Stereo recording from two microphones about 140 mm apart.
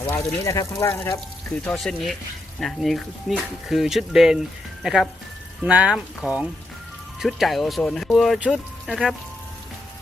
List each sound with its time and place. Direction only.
0.0 s speech: 15° left (ahead or behind)
1.6 s speech: 5° left (ahead or behind)